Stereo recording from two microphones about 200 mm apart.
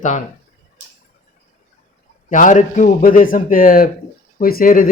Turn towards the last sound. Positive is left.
turn(degrees=45)  # may be behind; listen again after turning